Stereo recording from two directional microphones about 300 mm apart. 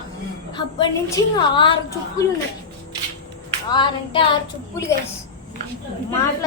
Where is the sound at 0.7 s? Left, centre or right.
Centre.